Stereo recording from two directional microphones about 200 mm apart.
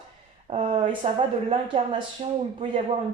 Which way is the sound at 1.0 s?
30° right (ahead or behind).